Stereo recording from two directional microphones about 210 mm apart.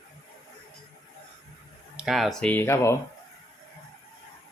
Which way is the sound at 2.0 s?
Centre (ahead or behind).